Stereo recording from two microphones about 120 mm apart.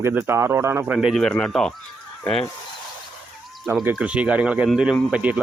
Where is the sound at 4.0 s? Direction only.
10° right (ahead or behind).